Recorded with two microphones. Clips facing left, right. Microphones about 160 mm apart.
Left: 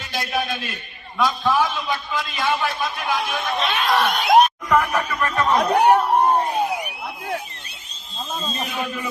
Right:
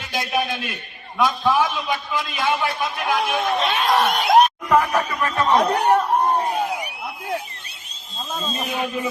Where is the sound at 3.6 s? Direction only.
40° right (ahead or behind).